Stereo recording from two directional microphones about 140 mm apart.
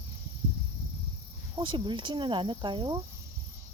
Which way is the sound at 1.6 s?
35° right (ahead or behind).